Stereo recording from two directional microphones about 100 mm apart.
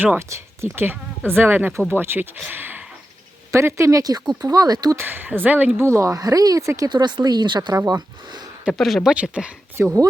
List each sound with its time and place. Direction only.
0.0 s speech: 20° right (ahead or behind); by 4.9 s 40° right (ahead or behind)
4.9 s speech: 20° right (ahead or behind)
6.9 s speech: 45° right (ahead or behind)
7.7 s speech: 40° right (ahead or behind)
8.8 s speech: centre (ahead or behind)
9.1 s speech: 10° right (ahead or behind)
9.7 s speech: 30° right (ahead or behind)